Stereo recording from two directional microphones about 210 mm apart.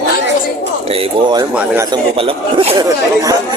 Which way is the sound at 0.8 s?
25° right (ahead or behind).